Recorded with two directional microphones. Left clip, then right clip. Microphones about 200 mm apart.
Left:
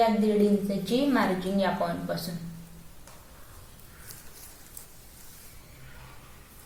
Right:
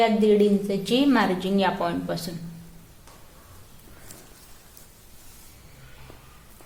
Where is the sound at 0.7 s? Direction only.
40° right (ahead or behind).